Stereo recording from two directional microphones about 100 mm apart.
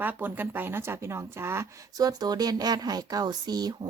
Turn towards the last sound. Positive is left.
turn(degrees=-40)  # may be behind; listen again after turning